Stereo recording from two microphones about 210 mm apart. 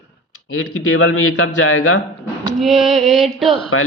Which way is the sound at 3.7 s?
80° left.